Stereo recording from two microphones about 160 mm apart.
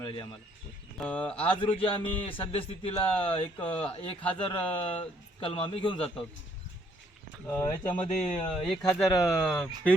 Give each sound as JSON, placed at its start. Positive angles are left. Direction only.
{"t": 0.0, "sound": "speech", "side_deg": 30}
{"t": 0.9, "sound": "speech", "side_deg": 10}
{"t": 1.3, "sound": "speech", "side_deg": 35}
{"t": 7.5, "sound": "speech", "side_deg": 10}
{"t": 9.1, "sound": "speech", "side_deg": 20}
{"t": 9.5, "sound": "speech", "side_deg": 10}